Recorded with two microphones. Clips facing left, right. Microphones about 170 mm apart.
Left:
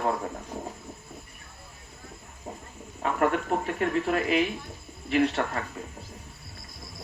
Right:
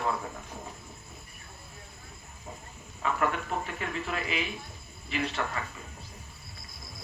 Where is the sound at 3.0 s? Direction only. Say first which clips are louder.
Left 4 dB; 50° left (ahead or behind).